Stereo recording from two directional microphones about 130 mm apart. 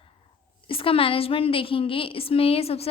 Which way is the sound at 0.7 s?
45° left (ahead or behind).